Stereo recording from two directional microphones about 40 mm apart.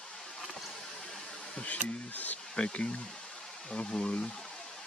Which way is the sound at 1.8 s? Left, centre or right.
Left.